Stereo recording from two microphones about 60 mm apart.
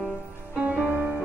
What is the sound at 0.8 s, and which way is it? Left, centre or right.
Music, right.